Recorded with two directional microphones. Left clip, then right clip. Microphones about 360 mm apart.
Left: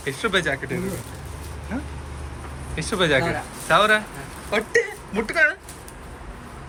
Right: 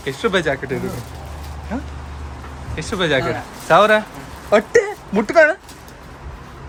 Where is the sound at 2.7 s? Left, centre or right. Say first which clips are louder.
Right 2 dB; centre.